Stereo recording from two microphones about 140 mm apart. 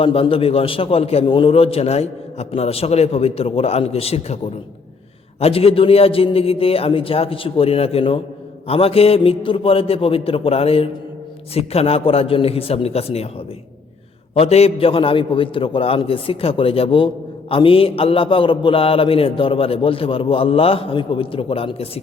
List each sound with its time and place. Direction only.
0.0 s a man's voice: 40° left (ahead or behind)
5.4 s a man's voice: 45° left (ahead or behind)
14.3 s a man's voice: 45° left (ahead or behind)